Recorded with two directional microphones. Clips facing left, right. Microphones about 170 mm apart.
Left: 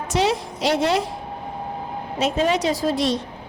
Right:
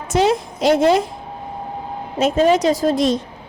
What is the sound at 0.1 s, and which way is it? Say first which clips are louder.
Speech: right 5 dB; 50° right (ahead or behind).